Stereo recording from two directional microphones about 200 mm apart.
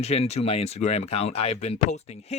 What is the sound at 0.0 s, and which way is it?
Speech, 30° left (ahead or behind).